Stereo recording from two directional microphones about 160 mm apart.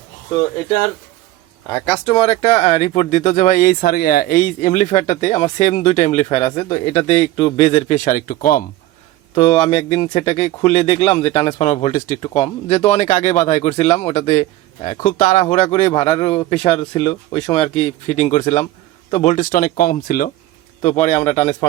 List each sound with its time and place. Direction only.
1.9 s speech: 35° left (ahead or behind); by 8.6 s 65° left (ahead or behind)
9.3 s speech: 35° left (ahead or behind); by 12.2 s 55° left (ahead or behind)
12.2 s speech: 40° left (ahead or behind)
14.8 s speech: 55° left (ahead or behind)
20.8 s speech: 45° left (ahead or behind)